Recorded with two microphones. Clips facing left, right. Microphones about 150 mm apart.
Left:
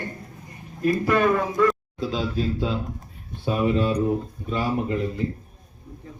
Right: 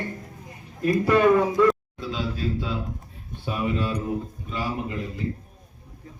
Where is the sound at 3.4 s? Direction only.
35° left (ahead or behind).